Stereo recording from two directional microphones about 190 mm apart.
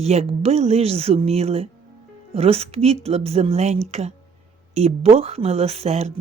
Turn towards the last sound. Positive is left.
turn(degrees=-35)  # may be behind; listen again after turning